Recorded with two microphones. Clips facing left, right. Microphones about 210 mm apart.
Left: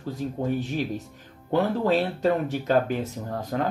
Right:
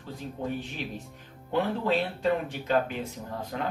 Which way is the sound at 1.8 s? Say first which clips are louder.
Left 4 dB; 40° left (ahead or behind).